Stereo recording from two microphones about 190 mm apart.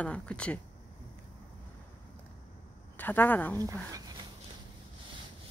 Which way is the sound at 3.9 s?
20° right (ahead or behind).